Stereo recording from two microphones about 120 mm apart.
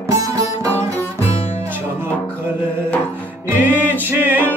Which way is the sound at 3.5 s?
15° right (ahead or behind).